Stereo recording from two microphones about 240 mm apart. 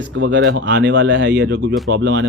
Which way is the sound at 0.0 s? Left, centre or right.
Right.